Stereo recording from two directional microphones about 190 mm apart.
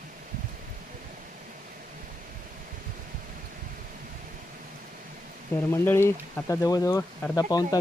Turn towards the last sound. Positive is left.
turn(degrees=20)  # may be behind; listen again after turning